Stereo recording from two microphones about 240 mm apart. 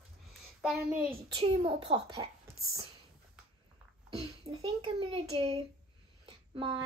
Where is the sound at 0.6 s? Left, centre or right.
Centre.